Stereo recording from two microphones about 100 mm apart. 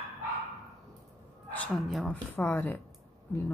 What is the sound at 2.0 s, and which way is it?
Speech, 20° left (ahead or behind).